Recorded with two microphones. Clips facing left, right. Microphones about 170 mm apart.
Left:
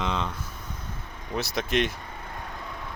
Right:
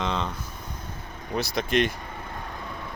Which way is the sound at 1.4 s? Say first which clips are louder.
Right 2 dB; centre (ahead or behind).